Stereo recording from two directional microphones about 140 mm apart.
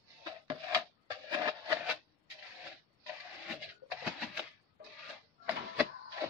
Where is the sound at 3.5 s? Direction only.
5° right (ahead or behind).